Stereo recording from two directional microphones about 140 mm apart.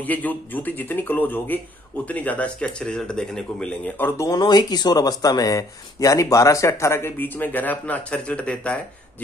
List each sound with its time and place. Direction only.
0.0 s speech: 10° left (ahead or behind)
4.3 s speech: 30° left (ahead or behind); by 8.7 s 10° left (ahead or behind)